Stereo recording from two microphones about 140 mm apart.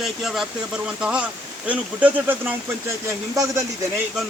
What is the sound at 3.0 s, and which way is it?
Speech, 20° right (ahead or behind).